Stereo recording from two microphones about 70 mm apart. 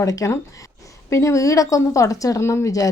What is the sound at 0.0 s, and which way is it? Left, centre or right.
Speech, left.